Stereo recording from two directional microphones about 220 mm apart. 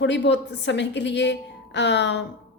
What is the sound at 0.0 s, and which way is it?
A woman's voice, 55° left (ahead or behind).